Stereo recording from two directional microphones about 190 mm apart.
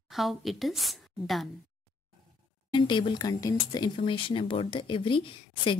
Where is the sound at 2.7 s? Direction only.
25° left (ahead or behind).